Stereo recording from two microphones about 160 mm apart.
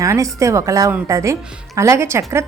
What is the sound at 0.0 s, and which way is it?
A woman's voice, 20° right (ahead or behind).